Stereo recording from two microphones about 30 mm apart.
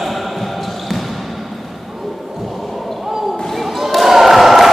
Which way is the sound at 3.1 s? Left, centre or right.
Centre.